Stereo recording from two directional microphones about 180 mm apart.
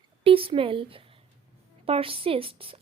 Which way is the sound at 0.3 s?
30° right (ahead or behind).